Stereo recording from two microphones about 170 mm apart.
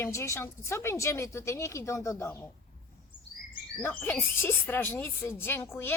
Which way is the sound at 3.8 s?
10° left (ahead or behind).